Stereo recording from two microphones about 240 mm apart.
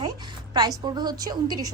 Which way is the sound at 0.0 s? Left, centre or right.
Centre.